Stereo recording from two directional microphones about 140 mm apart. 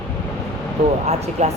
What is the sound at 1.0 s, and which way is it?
Speech, 50° right (ahead or behind).